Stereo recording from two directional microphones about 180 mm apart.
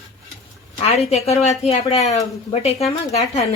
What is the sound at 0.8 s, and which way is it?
A woman's voice, 35° left (ahead or behind).